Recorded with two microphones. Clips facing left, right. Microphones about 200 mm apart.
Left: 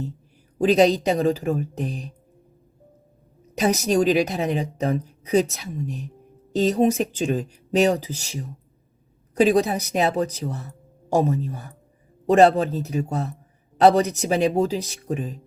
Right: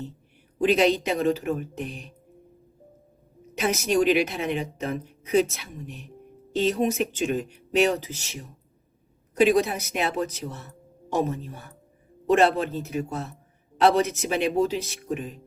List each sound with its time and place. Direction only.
0.6 s a woman's voice: 35° left (ahead or behind)
3.6 s a woman's voice: 35° left (ahead or behind)